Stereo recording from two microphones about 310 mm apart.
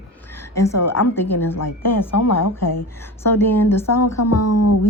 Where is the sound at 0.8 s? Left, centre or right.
Left.